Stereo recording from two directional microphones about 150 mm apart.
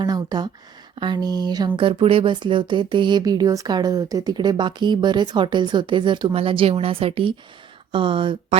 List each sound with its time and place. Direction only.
0.0 s speech: 25° right (ahead or behind)